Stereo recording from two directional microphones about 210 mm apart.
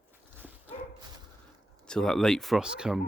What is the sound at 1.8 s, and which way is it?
Speech, 5° left (ahead or behind).